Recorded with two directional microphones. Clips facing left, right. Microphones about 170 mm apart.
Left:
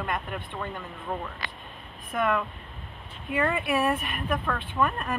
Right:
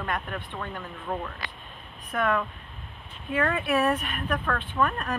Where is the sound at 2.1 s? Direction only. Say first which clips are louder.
Even; 5° left (ahead or behind).